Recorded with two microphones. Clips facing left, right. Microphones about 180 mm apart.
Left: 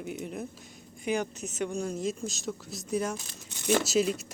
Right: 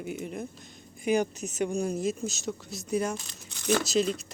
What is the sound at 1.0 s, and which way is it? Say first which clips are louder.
A woman's voice: right 4 dB; 10° right (ahead or behind).